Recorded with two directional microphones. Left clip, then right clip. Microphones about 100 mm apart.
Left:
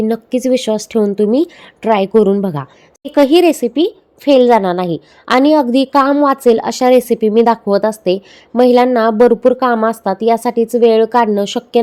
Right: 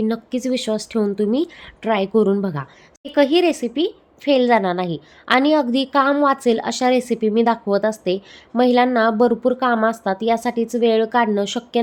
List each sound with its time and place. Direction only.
0.0 s speech: 40° left (ahead or behind)